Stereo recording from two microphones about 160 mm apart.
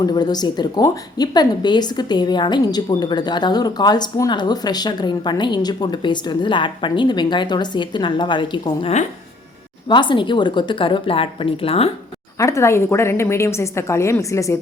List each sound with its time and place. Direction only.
0.0 s speech: 25° left (ahead or behind)
9.9 s a woman's voice: 30° left (ahead or behind)
12.4 s a woman's voice: 20° left (ahead or behind)